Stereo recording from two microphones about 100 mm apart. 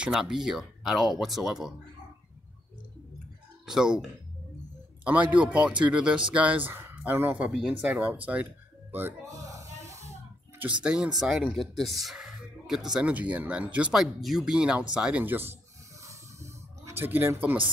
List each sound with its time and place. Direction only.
0.0 s speech: 5° right (ahead or behind)
3.6 s speech: 5° right (ahead or behind)
5.0 s speech: 15° right (ahead or behind)
9.2 s music: 35° right (ahead or behind)
10.6 s speech: 10° right (ahead or behind)
15.2 s speech: 20° right (ahead or behind)
16.1 s a sound: 30° right (ahead or behind)